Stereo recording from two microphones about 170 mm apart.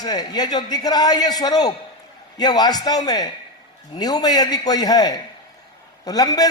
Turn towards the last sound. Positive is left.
turn(degrees=20)  # may be behind; listen again after turning